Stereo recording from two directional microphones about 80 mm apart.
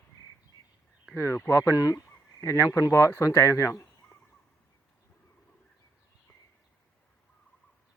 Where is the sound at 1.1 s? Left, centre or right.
Left.